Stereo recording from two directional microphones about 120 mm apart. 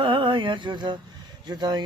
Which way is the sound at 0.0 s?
45° right (ahead or behind).